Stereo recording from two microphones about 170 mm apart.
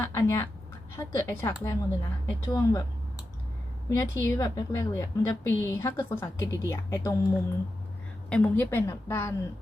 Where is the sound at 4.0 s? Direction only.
20° left (ahead or behind).